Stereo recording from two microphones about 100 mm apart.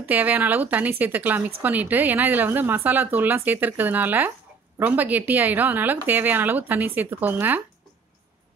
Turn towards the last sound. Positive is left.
turn(degrees=-20)  # may be behind; listen again after turning